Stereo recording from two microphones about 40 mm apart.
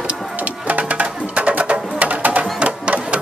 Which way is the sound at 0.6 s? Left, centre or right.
Right.